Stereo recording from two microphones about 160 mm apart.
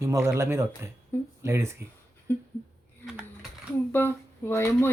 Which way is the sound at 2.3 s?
10° left (ahead or behind).